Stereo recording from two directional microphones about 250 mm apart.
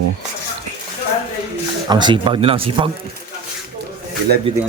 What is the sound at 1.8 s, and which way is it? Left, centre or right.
A man's voice, centre.